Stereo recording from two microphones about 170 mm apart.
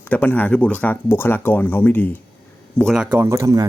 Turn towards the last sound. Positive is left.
turn(degrees=-20)  # may be behind; listen again after turning